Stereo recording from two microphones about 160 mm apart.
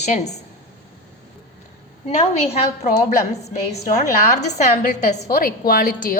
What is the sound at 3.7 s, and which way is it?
Speech, 45° left (ahead or behind).